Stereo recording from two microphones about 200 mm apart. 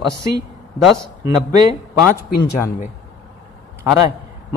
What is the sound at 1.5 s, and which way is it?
Speech, 20° right (ahead or behind).